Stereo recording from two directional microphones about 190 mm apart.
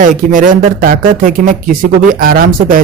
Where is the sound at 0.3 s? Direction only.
45° right (ahead or behind).